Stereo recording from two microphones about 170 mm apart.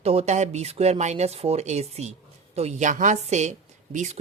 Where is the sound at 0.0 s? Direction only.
35° right (ahead or behind).